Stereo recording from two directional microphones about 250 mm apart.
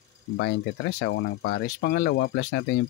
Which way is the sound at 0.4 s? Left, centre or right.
Left.